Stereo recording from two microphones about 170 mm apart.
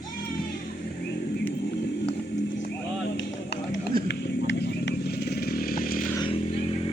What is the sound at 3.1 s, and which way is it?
Music, 90° left.